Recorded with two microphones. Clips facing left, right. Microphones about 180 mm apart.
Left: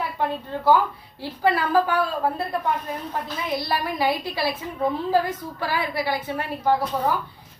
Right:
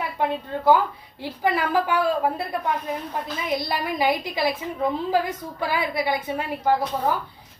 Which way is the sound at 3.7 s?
15° right (ahead or behind).